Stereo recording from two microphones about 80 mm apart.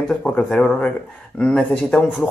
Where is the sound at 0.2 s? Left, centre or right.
Centre.